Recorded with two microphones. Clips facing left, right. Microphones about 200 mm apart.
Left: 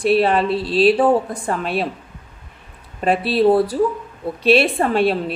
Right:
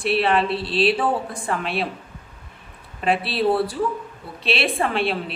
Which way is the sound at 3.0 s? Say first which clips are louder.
Left 5 dB; 45° left (ahead or behind).